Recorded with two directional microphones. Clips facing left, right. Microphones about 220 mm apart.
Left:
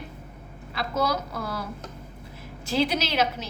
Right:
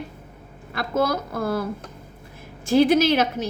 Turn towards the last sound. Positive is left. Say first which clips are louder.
# right 7 dB
turn(degrees=-50)  # may be behind; listen again after turning